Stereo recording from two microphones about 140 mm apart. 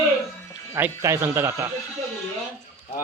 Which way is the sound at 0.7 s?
20° right (ahead or behind).